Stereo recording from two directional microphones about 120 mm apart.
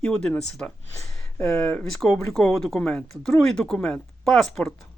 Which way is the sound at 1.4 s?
20° left (ahead or behind).